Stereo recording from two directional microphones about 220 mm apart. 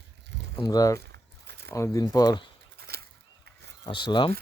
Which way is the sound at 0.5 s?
15° left (ahead or behind).